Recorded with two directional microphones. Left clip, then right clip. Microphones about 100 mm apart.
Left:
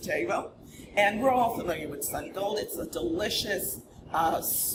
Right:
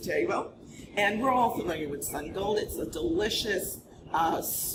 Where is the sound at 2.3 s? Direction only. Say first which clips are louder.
Right 2 dB; 30° left (ahead or behind).